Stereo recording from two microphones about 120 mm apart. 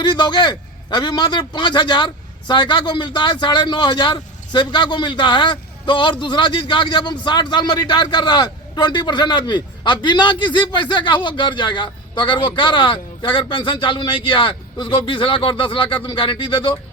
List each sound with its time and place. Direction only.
0.0 s a man's voice: 40° left (ahead or behind)